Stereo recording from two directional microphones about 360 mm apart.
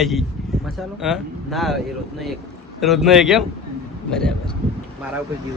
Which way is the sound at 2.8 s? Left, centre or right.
Centre.